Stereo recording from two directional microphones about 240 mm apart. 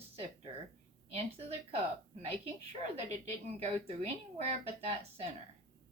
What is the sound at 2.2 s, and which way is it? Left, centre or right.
Speech, right.